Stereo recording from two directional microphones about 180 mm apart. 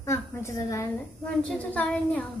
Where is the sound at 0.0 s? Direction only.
15° left (ahead or behind).